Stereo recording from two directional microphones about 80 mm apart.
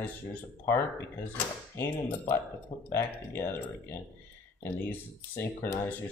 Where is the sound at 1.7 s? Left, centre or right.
Left.